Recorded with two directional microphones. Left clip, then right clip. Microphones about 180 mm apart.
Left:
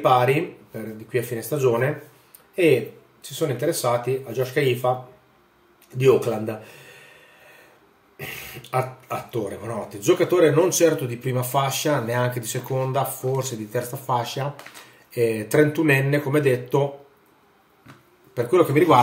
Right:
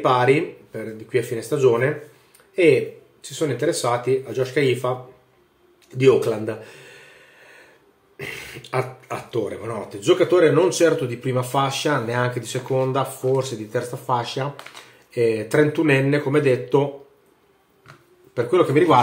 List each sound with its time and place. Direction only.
0.0 s speech: centre (ahead or behind)
8.2 s speech: centre (ahead or behind)
18.3 s speech: 10° left (ahead or behind)